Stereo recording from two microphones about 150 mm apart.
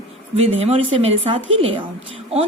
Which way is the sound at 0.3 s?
40° right (ahead or behind).